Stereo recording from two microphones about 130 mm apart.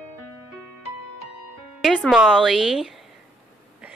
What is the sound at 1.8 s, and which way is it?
A woman's voice, centre (ahead or behind).